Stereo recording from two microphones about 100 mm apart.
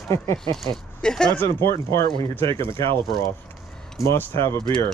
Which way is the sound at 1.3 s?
20° left (ahead or behind).